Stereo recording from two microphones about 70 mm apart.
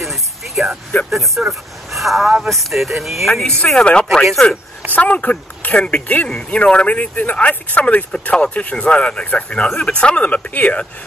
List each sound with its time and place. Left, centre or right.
0.0 s vehicle: centre
1.1 s speech: centre
3.4 s speech: centre